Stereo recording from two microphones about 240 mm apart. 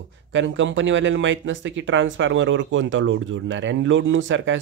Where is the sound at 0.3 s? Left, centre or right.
Right.